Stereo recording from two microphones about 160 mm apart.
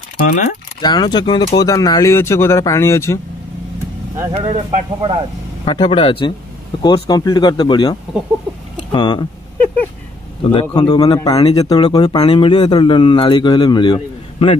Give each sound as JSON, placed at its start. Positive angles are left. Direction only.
{"t": 0.3, "sound": "speech", "side_deg": 50}
{"t": 0.7, "sound": "a man's voice", "side_deg": 25}
{"t": 4.2, "sound": "speech", "side_deg": -30}
{"t": 5.7, "sound": "a man's voice", "side_deg": 30}
{"t": 10.5, "sound": "a man's voice", "side_deg": 30}